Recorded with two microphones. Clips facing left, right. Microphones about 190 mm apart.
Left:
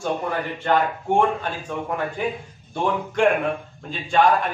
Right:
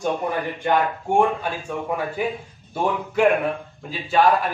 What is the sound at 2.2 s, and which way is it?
A man's voice, 10° right (ahead or behind).